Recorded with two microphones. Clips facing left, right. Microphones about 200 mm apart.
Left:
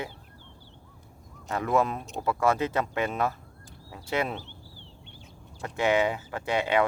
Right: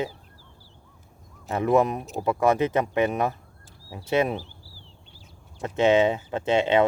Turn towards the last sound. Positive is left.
turn(degrees=-25)  # may be behind; listen again after turning